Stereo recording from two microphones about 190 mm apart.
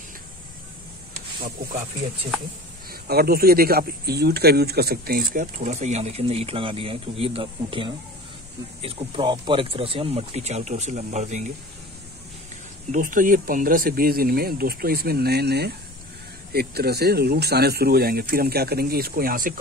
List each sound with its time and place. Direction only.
2.9 s speech: 55° right (ahead or behind); by 11.5 s 40° right (ahead or behind)
12.9 s speech: 45° right (ahead or behind)